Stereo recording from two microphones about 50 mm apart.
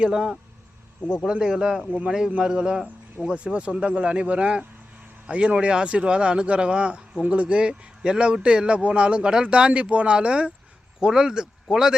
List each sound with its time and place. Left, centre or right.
0.0 s speech: centre